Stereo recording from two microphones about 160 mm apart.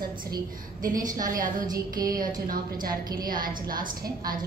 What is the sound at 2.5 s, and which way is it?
A woman's voice, 65° right (ahead or behind).